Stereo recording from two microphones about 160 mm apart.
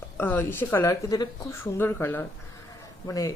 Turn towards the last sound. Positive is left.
turn(degrees=20)  # may be behind; listen again after turning